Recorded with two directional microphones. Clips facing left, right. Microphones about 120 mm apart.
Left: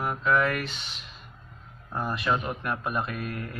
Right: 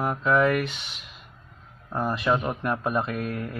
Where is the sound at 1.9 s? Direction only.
20° right (ahead or behind).